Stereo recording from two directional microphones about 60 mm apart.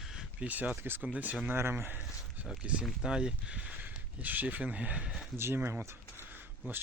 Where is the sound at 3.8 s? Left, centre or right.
Right.